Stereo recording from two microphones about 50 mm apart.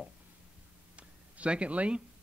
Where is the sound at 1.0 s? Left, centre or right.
Right.